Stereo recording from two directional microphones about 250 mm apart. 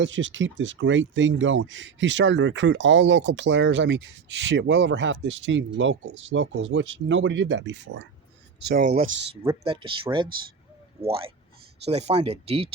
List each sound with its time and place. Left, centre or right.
0.0 s speech: right
8.7 s speech: right